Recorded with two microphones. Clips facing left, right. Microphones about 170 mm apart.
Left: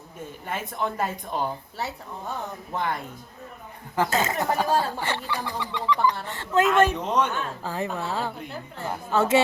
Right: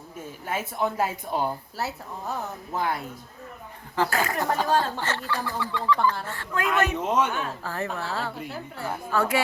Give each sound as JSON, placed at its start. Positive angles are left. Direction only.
{"t": 0.4, "sound": "a woman's voice", "side_deg": -5}
{"t": 3.9, "sound": "speech", "side_deg": 20}
{"t": 4.7, "sound": "speech", "side_deg": 10}
{"t": 6.9, "sound": "a woman's voice", "side_deg": -10}
{"t": 7.6, "sound": "speech", "side_deg": 15}